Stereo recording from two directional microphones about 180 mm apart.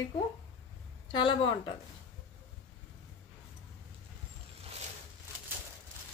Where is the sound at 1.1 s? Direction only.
25° left (ahead or behind).